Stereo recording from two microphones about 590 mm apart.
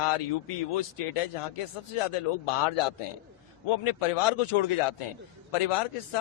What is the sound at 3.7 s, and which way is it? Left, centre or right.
A man's voice, left.